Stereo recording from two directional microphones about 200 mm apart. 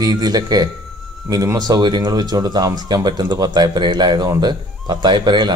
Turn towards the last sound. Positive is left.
turn(degrees=-20)  # may be behind; listen again after turning